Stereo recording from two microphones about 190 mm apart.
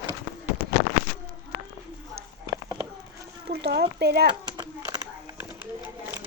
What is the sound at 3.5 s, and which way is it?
Speech, 55° right (ahead or behind).